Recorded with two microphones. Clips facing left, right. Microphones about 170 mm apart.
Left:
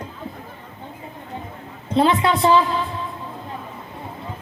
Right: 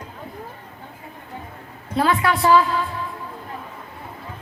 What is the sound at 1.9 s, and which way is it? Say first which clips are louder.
A woman's voice: left 3 dB; 20° left (ahead or behind).